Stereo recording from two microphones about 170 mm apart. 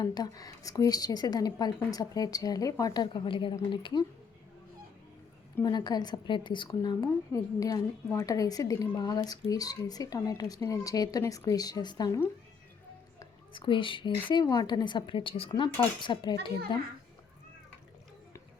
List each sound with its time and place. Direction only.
0.0 s a woman's voice: 25° left (ahead or behind)
5.5 s a woman's voice: 25° left (ahead or behind)